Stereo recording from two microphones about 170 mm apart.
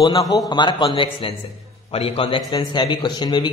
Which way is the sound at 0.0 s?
25° left (ahead or behind).